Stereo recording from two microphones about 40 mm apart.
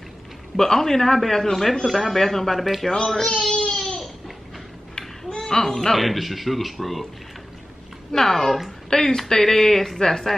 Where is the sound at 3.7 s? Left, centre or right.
Centre.